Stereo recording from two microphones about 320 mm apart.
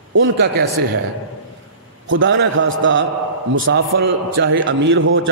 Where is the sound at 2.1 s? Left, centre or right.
Right.